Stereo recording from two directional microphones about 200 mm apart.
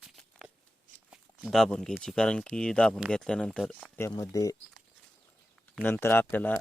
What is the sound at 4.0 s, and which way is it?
Speech, 15° left (ahead or behind).